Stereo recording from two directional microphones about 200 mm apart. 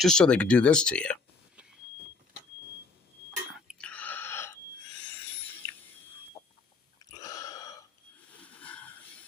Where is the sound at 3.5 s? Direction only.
5° right (ahead or behind); by 4.6 s 10° left (ahead or behind).